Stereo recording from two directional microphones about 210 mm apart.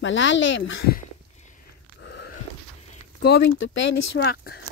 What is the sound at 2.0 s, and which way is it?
Biting, 55° left (ahead or behind).